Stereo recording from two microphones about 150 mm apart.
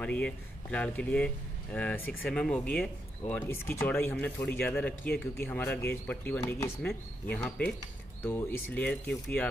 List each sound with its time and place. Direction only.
0.0 s speech: 10° left (ahead or behind)
6.4 s speech: 20° left (ahead or behind)
6.8 s speech: 5° left (ahead or behind)